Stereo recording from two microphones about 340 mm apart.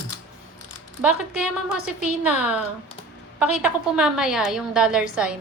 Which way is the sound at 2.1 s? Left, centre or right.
Centre.